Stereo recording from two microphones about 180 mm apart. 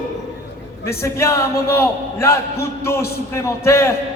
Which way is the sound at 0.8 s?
15° left (ahead or behind).